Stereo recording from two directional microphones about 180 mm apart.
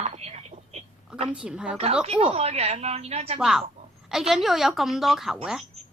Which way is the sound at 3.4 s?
5° right (ahead or behind).